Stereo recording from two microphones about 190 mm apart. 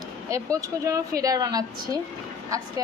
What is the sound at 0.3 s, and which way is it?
A woman's voice, 15° right (ahead or behind).